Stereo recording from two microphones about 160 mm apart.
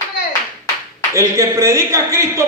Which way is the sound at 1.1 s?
20° right (ahead or behind).